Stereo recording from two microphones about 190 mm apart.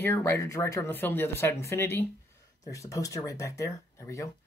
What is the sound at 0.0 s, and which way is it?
Speech, 15° left (ahead or behind).